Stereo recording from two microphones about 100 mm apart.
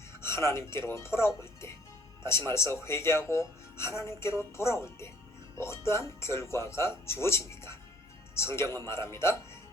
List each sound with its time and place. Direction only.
0.2 s speech: 25° left (ahead or behind)